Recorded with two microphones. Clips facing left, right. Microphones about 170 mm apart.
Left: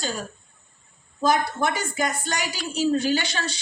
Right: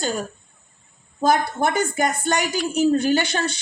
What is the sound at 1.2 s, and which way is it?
A woman's voice, 50° right (ahead or behind).